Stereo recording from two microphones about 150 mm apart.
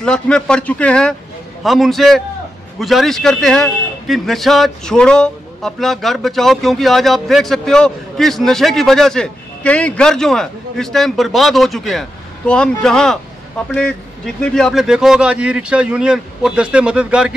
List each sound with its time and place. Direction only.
0.0 s a man's voice: 5° left (ahead or behind)